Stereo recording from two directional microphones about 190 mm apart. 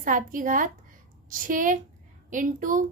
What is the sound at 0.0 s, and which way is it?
A woman's voice, 45° right (ahead or behind).